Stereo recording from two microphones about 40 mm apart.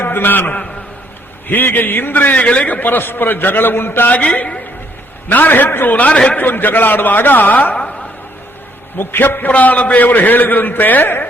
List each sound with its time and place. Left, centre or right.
0.0 s a man's voice: left
1.5 s a man's voice: left
2.8 s a man's voice: left
4.4 s a man's voice: left
5.3 s a man's voice: left
5.6 s a man's voice: left
6.1 s speech: left
6.3 s a man's voice: left
7.7 s a sound: left
9.0 s a man's voice: left
9.5 s a man's voice: left